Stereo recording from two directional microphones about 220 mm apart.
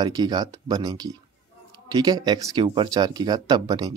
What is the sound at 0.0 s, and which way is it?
Speech, 20° right (ahead or behind).